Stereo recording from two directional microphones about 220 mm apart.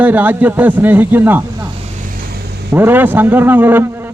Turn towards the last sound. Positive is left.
turn(degrees=-10)  # may be behind; listen again after turning